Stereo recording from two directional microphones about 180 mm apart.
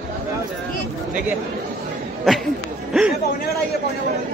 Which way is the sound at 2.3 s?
Centre (ahead or behind).